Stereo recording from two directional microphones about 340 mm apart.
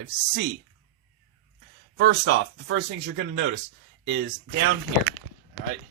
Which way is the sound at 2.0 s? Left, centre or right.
Right.